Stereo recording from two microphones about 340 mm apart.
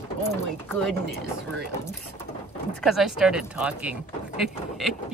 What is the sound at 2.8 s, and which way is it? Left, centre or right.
Speech, centre.